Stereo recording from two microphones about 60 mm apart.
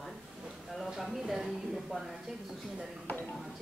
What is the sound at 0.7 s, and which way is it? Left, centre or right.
A woman's voice, centre.